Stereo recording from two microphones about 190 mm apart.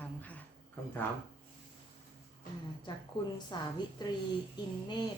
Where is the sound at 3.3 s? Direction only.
20° left (ahead or behind).